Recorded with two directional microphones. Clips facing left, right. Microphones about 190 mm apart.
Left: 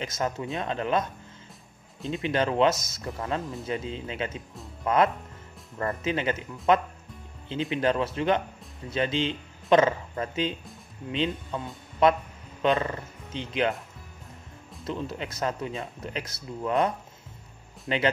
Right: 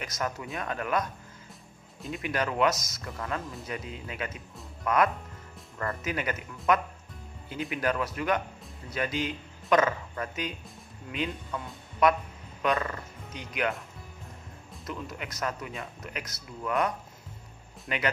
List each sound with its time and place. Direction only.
0.0 s speech: 25° left (ahead or behind)
2.0 s speech: 25° left (ahead or behind)
14.9 s speech: 30° left (ahead or behind)